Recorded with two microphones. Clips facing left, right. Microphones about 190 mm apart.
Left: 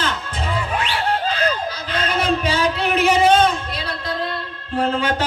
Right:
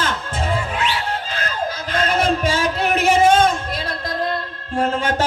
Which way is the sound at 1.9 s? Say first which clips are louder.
Right 1 dB; 45° right (ahead or behind).